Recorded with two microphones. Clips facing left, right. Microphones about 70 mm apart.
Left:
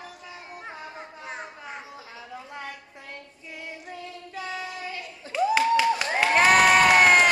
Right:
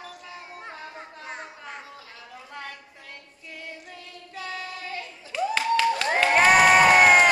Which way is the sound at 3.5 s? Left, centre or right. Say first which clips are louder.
Left 2 dB; centre.